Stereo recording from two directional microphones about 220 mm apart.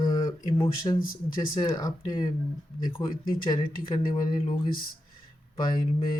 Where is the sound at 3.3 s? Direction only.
20° left (ahead or behind).